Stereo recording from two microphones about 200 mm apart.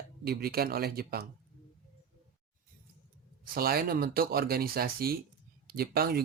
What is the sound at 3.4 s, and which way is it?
Speech, 50° right (ahead or behind).